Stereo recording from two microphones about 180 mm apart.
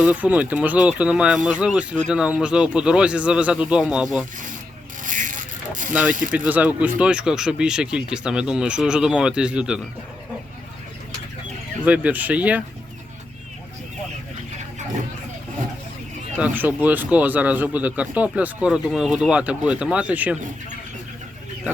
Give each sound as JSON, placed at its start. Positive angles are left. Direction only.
{"t": 0.0, "sound": "speech", "side_deg": -10}
{"t": 5.0, "sound": "vehicle", "side_deg": -45}
{"t": 5.9, "sound": "speech", "side_deg": -10}
{"t": 11.8, "sound": "speech", "side_deg": -10}
{"t": 16.4, "sound": "speech", "side_deg": -10}